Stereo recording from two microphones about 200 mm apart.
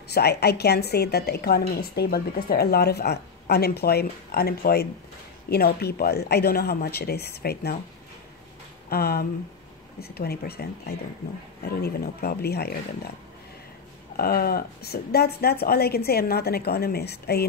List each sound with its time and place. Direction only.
0.1 s a woman's voice: 55° left (ahead or behind)
8.8 s a woman's voice: 50° left (ahead or behind)
14.1 s a woman's voice: 50° left (ahead or behind)